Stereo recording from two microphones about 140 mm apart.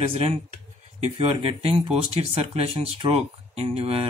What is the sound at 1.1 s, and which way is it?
Speech, 40° right (ahead or behind).